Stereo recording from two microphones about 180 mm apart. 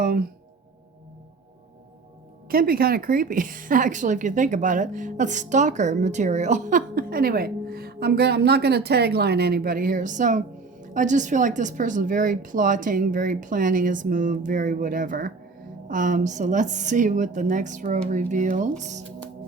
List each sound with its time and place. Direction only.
0.0 s speech: 55° right (ahead or behind)
2.5 s a woman's voice: 55° right (ahead or behind)